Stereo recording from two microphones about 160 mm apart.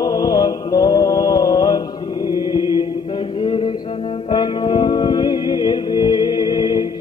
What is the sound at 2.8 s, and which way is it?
Mantra, 30° left (ahead or behind).